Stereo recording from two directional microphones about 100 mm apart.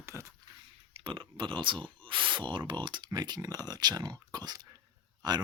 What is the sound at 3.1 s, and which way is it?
Speech, 45° right (ahead or behind).